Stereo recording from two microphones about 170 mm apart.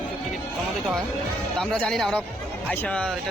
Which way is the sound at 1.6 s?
5° left (ahead or behind).